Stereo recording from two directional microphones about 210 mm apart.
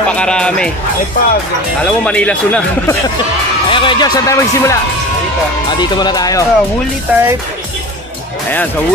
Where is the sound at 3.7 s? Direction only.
25° left (ahead or behind).